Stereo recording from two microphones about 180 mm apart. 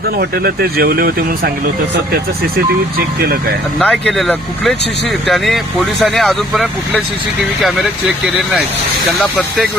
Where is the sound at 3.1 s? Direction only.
60° right (ahead or behind).